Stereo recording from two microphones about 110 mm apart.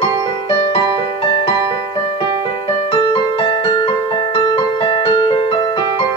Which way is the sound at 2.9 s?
55° left (ahead or behind).